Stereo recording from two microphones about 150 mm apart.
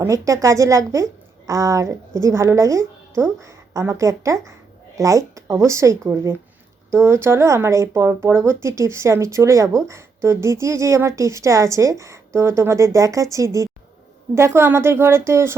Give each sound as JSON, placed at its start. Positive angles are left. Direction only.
{"t": 0.0, "sound": "a woman's voice", "side_deg": -20}